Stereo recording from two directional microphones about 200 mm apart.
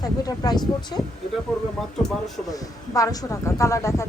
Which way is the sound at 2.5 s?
20° left (ahead or behind).